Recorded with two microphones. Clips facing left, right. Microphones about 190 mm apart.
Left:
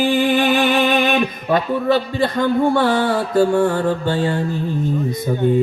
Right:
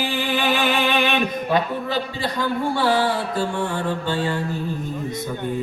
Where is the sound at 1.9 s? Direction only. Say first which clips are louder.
Left 8 dB; 55° left (ahead or behind).